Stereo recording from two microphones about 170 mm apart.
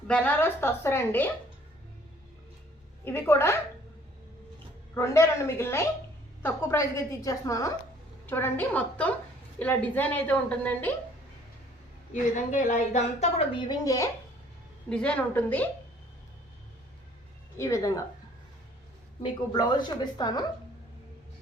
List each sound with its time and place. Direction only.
0.1 s a woman's voice: 10° left (ahead or behind)
3.0 s a woman's voice: 15° left (ahead or behind)
4.9 s a woman's voice: 15° left (ahead or behind)
12.1 s a woman's voice: 45° left (ahead or behind)
13.7 s a woman's voice: 20° left (ahead or behind)
14.8 s a woman's voice: 5° left (ahead or behind)
17.6 s a woman's voice: 20° left (ahead or behind)
19.2 s a woman's voice: 25° left (ahead or behind)